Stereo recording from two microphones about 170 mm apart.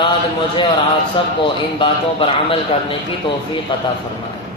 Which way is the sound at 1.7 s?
30° left (ahead or behind).